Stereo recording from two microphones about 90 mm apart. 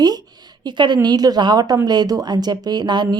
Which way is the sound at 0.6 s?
55° right (ahead or behind).